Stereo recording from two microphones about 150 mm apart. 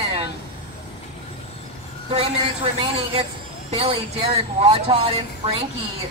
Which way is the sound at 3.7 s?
40° right (ahead or behind).